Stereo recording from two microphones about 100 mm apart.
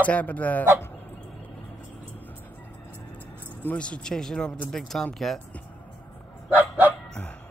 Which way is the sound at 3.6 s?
10° left (ahead or behind).